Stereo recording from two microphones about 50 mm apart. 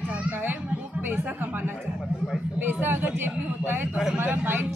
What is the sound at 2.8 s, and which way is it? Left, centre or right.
A child's voice, right.